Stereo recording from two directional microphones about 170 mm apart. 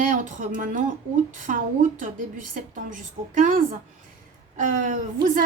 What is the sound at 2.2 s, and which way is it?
A woman's voice, 50° right (ahead or behind).